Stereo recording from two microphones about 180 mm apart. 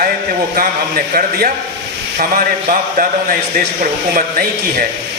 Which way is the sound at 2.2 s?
50° right (ahead or behind).